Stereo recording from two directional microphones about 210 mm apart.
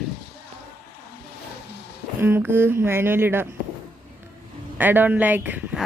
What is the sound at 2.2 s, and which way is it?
Speech, 10° right (ahead or behind).